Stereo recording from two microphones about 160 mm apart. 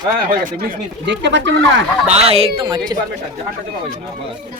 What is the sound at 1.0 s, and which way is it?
Speech, 90° right.